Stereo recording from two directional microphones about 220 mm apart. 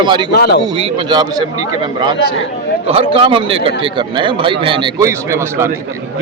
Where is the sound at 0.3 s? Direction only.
45° left (ahead or behind).